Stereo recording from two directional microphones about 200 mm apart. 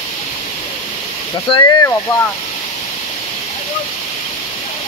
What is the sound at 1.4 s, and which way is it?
Speech, 20° left (ahead or behind).